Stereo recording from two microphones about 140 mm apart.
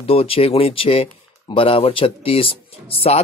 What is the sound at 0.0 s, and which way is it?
Speech, 45° left (ahead or behind).